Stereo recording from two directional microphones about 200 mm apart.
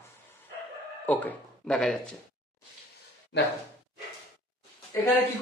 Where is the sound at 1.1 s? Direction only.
10° left (ahead or behind).